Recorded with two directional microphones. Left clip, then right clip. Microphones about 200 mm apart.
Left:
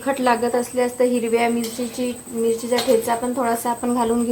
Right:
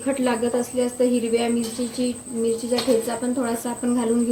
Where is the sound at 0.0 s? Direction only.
20° right (ahead or behind).